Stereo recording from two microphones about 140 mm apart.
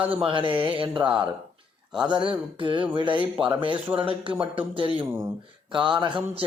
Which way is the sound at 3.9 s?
40° right (ahead or behind).